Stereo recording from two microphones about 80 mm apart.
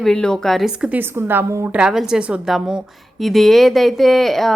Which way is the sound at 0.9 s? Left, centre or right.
Right.